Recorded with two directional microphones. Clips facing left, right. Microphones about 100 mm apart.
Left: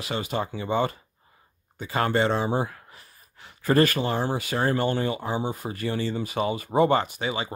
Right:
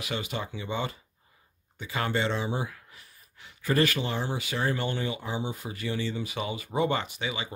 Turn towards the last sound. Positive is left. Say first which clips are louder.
# left 5 dB
turn(degrees=40)  # may be behind; listen again after turning